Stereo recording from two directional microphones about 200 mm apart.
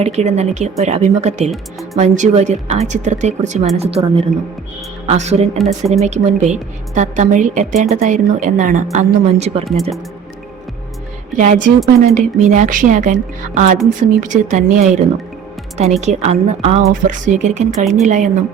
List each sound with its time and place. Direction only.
0.0 s a woman's voice: 35° right (ahead or behind)
11.3 s a woman's voice: 40° right (ahead or behind)